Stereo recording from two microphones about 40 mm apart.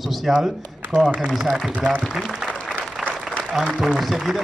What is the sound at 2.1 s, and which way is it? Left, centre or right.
Speech, centre.